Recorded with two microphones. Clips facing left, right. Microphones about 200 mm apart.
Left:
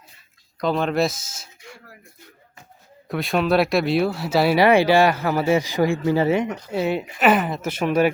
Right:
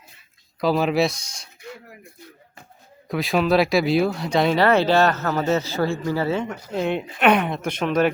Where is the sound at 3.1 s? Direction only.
Centre (ahead or behind).